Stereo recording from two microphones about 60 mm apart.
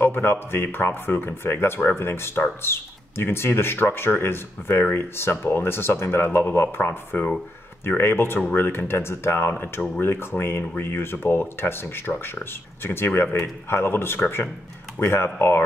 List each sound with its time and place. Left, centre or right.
0.0 s speech: left